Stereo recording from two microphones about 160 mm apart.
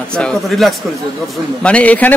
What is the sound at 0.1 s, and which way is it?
Speech, 5° left (ahead or behind).